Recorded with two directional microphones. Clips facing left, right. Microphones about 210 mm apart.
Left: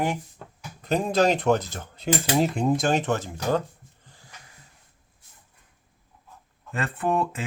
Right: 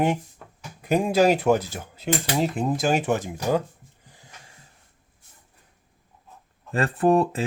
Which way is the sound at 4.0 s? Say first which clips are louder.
Right 3 dB; 15° right (ahead or behind).